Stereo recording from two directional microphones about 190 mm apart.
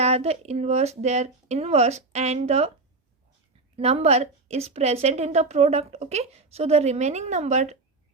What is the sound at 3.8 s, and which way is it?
A woman's voice, 30° right (ahead or behind).